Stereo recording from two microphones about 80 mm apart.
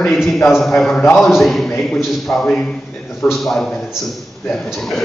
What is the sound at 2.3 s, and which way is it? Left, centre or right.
Speech, left.